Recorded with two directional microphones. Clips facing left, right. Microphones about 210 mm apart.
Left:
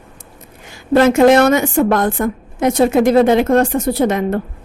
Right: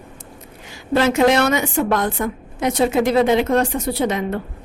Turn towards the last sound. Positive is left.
turn(degrees=50)  # may be behind; listen again after turning